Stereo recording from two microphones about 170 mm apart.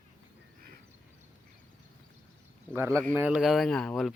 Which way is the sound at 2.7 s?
10° right (ahead or behind).